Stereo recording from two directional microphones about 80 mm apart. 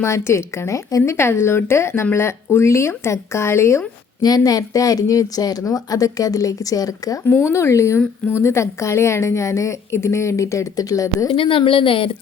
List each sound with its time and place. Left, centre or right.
0.0 s speech: left
1.1 s speech: left
4.2 s speech: left
7.3 s speech: left
11.3 s speech: left